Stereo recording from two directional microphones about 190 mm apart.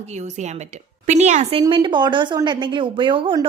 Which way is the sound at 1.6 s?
25° right (ahead or behind).